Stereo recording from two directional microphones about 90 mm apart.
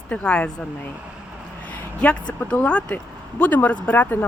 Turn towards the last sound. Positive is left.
turn(degrees=20)  # may be behind; listen again after turning